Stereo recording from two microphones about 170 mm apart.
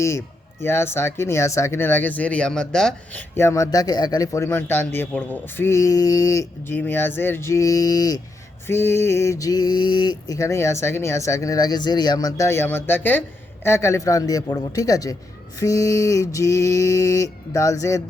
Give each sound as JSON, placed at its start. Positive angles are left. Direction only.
{"t": 0.0, "sound": "speech", "side_deg": 15}
{"t": 3.3, "sound": "speech", "side_deg": 15}
{"t": 13.7, "sound": "a sound", "side_deg": 15}